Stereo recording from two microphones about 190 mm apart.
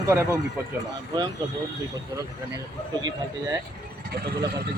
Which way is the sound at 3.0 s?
20° right (ahead or behind).